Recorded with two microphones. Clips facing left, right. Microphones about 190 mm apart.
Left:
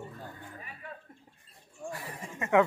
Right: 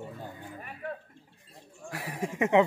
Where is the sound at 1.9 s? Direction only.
80° right.